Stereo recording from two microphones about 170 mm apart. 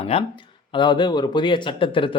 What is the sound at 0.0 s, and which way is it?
Speech, 35° left (ahead or behind).